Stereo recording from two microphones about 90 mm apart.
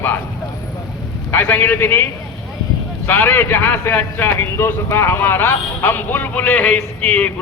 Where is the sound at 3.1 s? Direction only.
25° left (ahead or behind).